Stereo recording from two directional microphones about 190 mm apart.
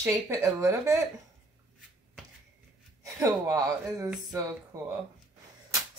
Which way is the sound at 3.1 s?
15° right (ahead or behind).